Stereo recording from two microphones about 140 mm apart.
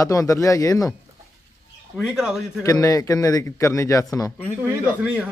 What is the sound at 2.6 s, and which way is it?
Speech, 25° left (ahead or behind).